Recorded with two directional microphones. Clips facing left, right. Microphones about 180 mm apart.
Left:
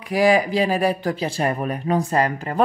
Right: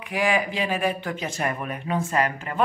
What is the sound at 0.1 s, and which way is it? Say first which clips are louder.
Speech: left 7 dB; 35° left (ahead or behind).